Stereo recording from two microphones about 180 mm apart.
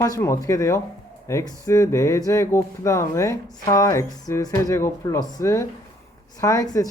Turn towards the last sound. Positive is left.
turn(degrees=20)  # may be behind; listen again after turning